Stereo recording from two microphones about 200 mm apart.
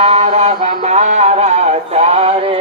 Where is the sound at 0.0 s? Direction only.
30° right (ahead or behind).